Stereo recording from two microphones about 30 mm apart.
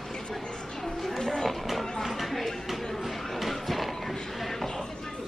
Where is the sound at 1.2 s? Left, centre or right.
Centre.